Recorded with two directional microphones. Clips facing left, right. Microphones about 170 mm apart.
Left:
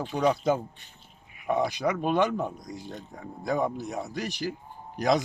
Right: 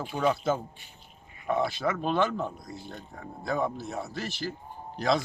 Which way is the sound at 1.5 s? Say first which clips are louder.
Left 2 dB; 15° left (ahead or behind).